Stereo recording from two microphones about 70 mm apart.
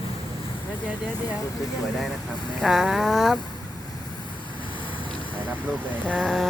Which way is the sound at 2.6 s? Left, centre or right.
Centre.